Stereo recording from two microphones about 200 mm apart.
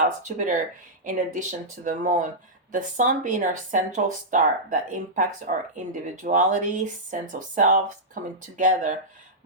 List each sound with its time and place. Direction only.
0.0 s speech: 40° right (ahead or behind)